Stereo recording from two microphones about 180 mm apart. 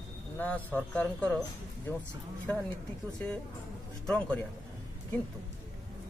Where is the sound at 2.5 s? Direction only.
10° left (ahead or behind).